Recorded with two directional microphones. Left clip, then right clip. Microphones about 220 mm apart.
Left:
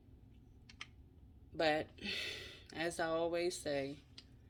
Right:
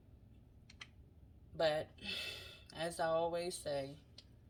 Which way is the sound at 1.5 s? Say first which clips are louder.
Left 1 dB; 30° left (ahead or behind).